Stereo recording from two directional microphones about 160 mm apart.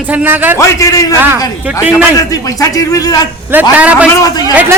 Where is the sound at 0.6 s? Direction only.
20° left (ahead or behind).